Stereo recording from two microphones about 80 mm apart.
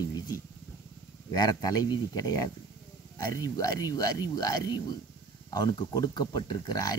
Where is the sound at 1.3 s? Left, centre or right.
Left.